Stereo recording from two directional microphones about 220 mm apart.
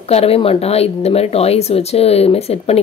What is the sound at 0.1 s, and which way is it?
A woman's voice, 25° left (ahead or behind).